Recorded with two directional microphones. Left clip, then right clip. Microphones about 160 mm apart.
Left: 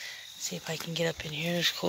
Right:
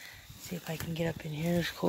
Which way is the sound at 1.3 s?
25° right (ahead or behind).